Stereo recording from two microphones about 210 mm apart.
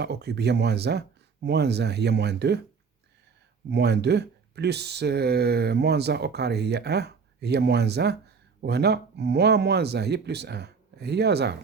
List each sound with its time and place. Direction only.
0.0 s speech: 50° right (ahead or behind)
3.7 s speech: 55° right (ahead or behind)